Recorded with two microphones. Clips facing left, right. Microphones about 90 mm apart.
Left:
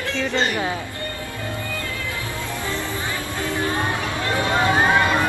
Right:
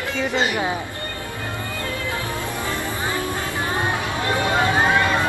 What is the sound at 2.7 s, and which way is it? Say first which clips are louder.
Music: even; 20° right (ahead or behind).